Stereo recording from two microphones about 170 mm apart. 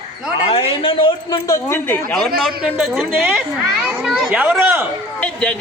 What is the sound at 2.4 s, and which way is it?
A man's voice, centre (ahead or behind).